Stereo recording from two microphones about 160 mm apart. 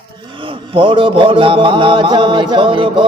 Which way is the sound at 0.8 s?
30° right (ahead or behind).